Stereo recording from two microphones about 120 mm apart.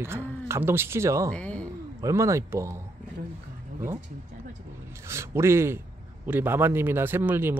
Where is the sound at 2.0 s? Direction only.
25° right (ahead or behind).